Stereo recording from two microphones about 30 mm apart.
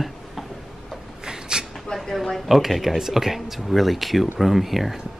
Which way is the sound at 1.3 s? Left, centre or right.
Right.